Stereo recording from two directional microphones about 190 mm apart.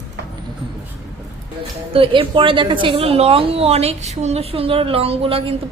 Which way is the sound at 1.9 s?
30° right (ahead or behind).